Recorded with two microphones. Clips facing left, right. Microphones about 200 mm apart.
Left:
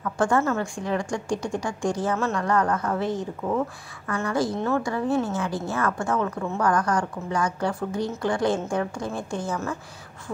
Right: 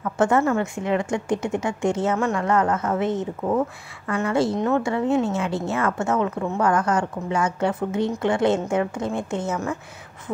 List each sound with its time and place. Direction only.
0.2 s a woman's voice: 20° right (ahead or behind)